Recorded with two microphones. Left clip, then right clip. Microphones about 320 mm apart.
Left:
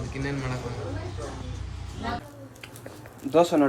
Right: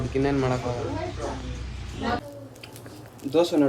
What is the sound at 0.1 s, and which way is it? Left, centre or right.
Speech, centre.